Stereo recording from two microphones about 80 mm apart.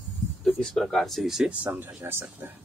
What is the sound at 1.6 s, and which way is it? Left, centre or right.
Speech, right.